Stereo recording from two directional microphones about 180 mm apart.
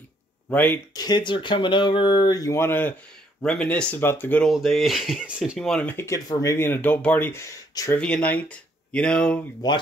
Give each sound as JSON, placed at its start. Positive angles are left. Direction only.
{"t": 0.5, "sound": "speech", "side_deg": 10}
{"t": 0.9, "sound": "speech", "side_deg": 25}
{"t": 4.5, "sound": "speech", "side_deg": 0}
{"t": 8.0, "sound": "speech", "side_deg": 5}
{"t": 9.6, "sound": "speech", "side_deg": 20}